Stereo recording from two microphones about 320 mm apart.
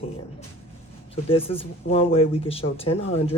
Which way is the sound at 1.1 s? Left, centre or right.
Centre.